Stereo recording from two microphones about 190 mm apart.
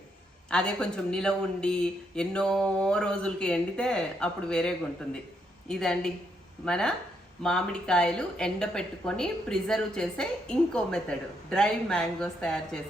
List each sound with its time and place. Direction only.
0.5 s speech: 5° left (ahead or behind)